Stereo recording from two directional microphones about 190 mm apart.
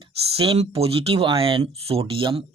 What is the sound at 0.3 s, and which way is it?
Speech, 30° right (ahead or behind).